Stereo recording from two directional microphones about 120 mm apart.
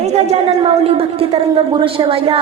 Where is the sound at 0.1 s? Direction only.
55° right (ahead or behind).